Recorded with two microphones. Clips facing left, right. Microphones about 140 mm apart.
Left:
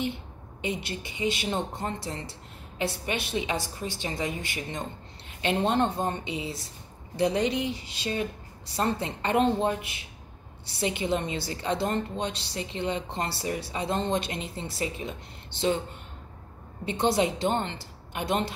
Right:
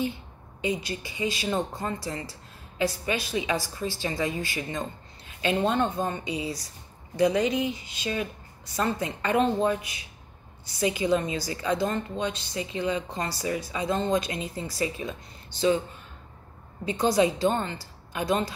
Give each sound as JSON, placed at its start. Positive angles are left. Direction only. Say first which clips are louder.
{"t": 0.8, "sound": "a woman's voice", "louder": "even", "side_deg": 20}
{"t": 16.8, "sound": "a woman's voice", "louder": "right 2 dB", "side_deg": 25}